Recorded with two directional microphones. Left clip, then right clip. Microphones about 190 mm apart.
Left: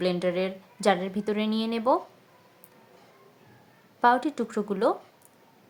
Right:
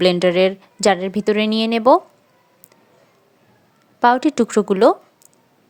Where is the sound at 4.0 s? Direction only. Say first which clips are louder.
Right 8 dB; 40° right (ahead or behind).